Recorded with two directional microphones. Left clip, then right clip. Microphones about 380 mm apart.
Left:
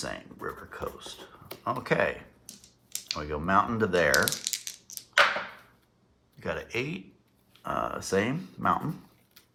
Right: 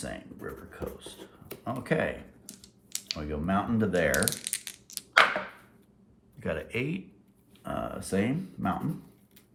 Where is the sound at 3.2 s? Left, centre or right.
Centre.